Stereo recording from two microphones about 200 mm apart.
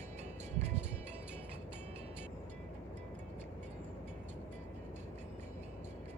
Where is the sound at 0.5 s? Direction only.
35° right (ahead or behind).